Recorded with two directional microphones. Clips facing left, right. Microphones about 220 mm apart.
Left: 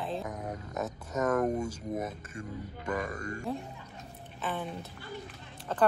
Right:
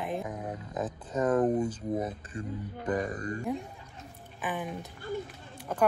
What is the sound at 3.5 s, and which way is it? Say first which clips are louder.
Speech: right 2 dB; 15° right (ahead or behind).